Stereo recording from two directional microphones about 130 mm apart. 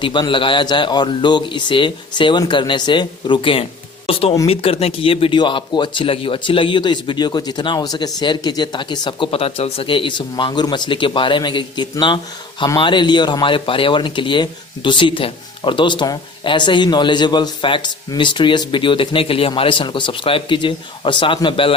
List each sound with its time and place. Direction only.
0.0 s speech: 40° left (ahead or behind)